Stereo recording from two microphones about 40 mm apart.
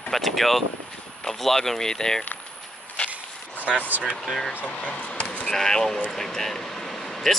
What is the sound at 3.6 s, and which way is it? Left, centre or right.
Speech, left.